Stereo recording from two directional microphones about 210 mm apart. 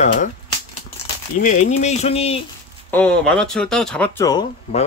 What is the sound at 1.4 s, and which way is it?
Speech, 35° left (ahead or behind).